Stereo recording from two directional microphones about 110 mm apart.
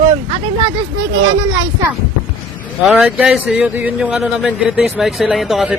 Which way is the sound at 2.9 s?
10° right (ahead or behind).